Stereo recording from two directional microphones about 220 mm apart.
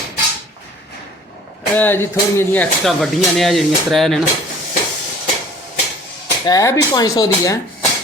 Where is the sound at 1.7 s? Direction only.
10° left (ahead or behind).